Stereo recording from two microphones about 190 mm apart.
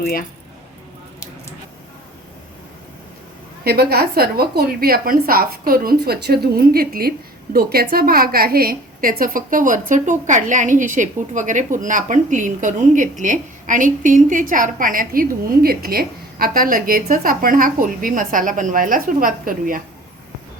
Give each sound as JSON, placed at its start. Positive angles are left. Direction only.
{"t": 0.0, "sound": "speech", "side_deg": 50}
{"t": 3.6, "sound": "a woman's voice", "side_deg": -55}